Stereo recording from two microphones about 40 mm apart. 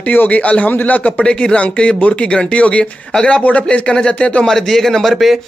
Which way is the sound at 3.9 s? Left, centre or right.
Centre.